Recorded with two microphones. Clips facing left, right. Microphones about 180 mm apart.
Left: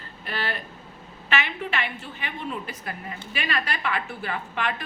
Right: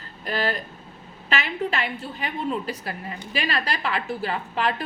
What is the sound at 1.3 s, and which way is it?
A woman's voice, 35° right (ahead or behind).